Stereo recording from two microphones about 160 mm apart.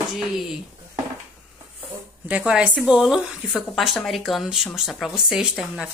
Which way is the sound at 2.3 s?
5° right (ahead or behind).